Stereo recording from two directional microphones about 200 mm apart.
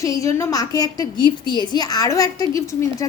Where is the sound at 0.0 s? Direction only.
15° left (ahead or behind).